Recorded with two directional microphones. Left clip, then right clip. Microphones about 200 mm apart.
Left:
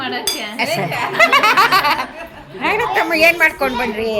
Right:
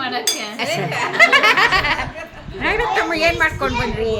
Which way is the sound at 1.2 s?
20° left (ahead or behind).